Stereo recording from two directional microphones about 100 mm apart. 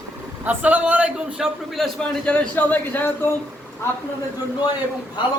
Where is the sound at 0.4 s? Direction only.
15° right (ahead or behind).